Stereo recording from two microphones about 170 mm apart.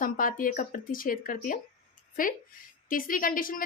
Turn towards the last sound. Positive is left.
turn(degrees=55)  # may be behind; listen again after turning